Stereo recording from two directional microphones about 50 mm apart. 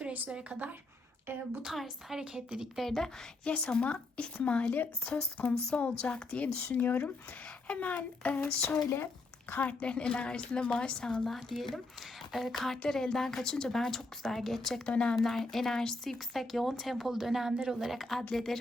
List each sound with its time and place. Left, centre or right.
0.3 s a woman's voice: centre
1.3 s speech: right
1.6 s speech: centre
2.2 s a woman's voice: centre
2.7 s speech: centre
3.4 s a child's voice: left; by 14.8 s centre
14.8 s a child's voice: centre
15.1 s a woman's voice: centre